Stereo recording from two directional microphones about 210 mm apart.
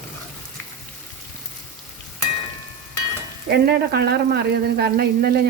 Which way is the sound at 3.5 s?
50° right (ahead or behind).